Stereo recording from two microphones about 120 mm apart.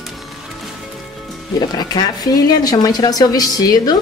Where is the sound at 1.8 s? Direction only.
35° left (ahead or behind).